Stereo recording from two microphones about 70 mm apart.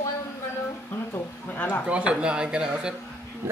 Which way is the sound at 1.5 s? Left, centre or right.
Left.